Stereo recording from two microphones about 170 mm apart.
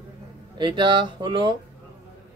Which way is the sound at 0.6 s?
25° right (ahead or behind).